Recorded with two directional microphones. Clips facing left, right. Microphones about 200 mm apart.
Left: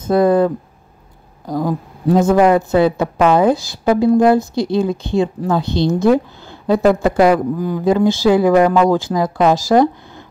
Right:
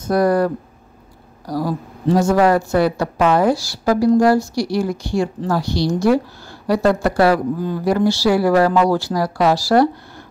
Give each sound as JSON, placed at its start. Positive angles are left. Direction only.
{"t": 0.1, "sound": "a woman's voice", "side_deg": 25}